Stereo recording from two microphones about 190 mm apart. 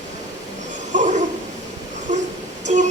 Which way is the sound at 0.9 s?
40° right (ahead or behind).